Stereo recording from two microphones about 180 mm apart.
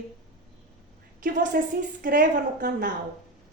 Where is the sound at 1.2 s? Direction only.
45° right (ahead or behind).